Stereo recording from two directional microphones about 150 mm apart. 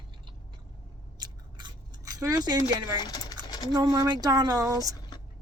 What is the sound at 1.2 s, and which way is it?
Scissors, 30° right (ahead or behind).